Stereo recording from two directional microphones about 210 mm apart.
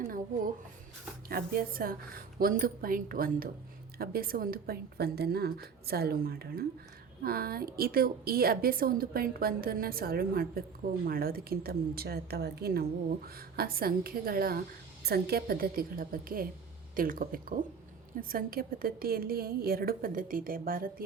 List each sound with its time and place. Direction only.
1.3 s a woman's voice: 45° right (ahead or behind)